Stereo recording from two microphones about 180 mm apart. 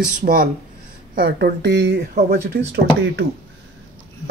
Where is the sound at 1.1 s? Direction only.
60° right (ahead or behind).